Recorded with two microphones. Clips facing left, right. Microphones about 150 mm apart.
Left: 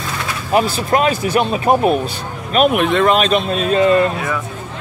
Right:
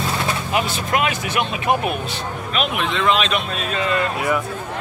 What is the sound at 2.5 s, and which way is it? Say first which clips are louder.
Speech: left 10 dB; 50° left (ahead or behind).